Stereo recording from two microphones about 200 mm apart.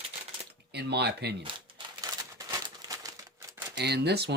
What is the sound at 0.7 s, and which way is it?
Speech, 55° right (ahead or behind).